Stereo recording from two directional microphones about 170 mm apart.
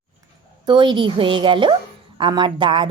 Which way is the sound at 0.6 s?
25° right (ahead or behind).